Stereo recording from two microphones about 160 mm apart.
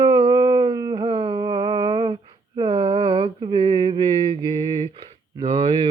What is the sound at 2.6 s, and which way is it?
Mantra, 35° right (ahead or behind).